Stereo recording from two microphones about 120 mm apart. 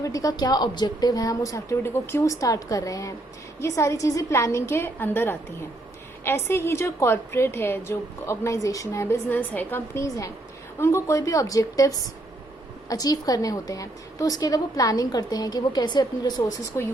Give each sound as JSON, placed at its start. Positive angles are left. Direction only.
{"t": 0.0, "sound": "a woman's voice", "side_deg": 30}